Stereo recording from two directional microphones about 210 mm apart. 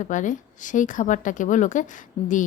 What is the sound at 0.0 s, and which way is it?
A woman's voice, 35° left (ahead or behind).